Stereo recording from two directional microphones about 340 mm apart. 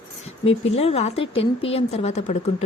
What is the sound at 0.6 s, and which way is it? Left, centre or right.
A woman's voice, centre.